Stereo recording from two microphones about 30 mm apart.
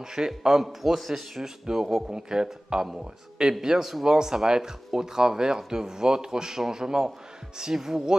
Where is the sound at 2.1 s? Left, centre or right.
Right.